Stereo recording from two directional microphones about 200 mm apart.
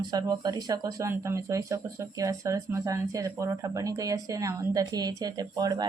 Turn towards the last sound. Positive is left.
turn(degrees=-15)  # may be behind; listen again after turning